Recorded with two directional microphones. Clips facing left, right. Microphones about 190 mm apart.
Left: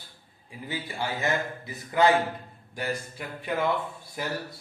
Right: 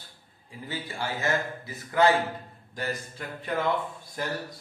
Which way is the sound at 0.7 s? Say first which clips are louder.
Left 1 dB; 15° left (ahead or behind).